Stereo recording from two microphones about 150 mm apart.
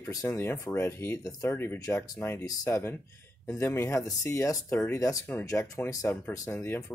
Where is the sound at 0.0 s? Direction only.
25° left (ahead or behind).